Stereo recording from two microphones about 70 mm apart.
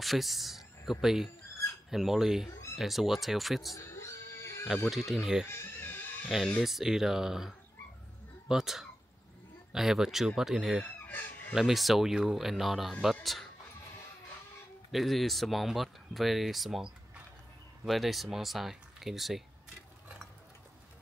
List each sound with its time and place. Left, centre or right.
0.0 s speech: centre
3.7 s music: left
4.8 s speech: centre
5.5 s music: left
6.2 s speech: centre
11.1 s chicken: left
11.5 s speech: centre
14.9 s speech: centre